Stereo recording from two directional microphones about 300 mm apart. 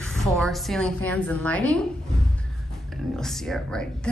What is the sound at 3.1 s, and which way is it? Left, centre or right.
Speech, centre.